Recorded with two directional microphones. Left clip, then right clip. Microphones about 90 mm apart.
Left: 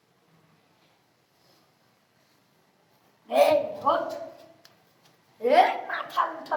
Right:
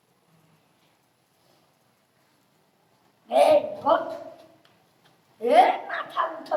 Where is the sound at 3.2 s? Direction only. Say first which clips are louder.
Right 2 dB; 30° right (ahead or behind).